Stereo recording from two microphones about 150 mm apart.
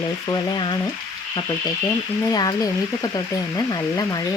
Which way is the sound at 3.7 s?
25° left (ahead or behind).